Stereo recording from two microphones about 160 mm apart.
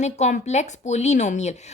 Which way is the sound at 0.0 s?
45° left (ahead or behind).